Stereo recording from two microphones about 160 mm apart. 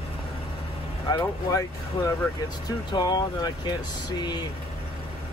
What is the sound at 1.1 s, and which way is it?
Speech, 20° left (ahead or behind).